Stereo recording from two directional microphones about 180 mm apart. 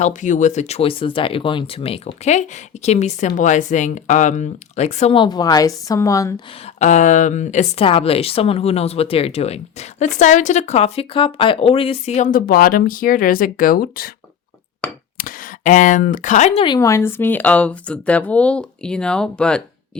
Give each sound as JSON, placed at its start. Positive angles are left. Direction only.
{"t": 0.0, "sound": "speech", "side_deg": 45}
{"t": 6.7, "sound": "speech", "side_deg": 40}
{"t": 12.3, "sound": "speech", "side_deg": 55}
{"t": 15.2, "sound": "speech", "side_deg": 45}
{"t": 16.6, "sound": "speech", "side_deg": 20}